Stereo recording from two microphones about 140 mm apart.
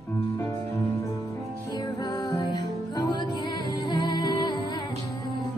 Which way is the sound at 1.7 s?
30° left (ahead or behind).